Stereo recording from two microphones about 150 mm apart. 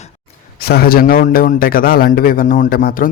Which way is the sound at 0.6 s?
90° left.